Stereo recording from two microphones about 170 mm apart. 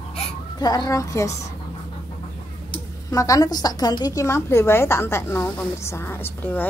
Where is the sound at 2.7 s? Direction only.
20° left (ahead or behind).